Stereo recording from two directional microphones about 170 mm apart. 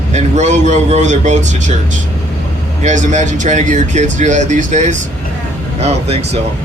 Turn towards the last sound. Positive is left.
turn(degrees=-35)  # may be behind; listen again after turning